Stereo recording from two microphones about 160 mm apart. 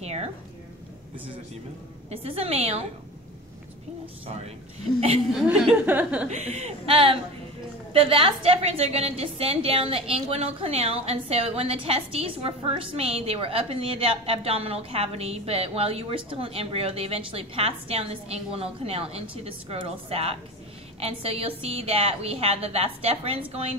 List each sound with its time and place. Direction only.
0.0 s a woman's voice: 40° right (ahead or behind)
2.0 s a woman's voice: 40° right (ahead or behind)
5.3 s speech: 5° right (ahead or behind)
5.9 s chuckle: 10° right (ahead or behind)
6.2 s a woman's voice: 45° right (ahead or behind)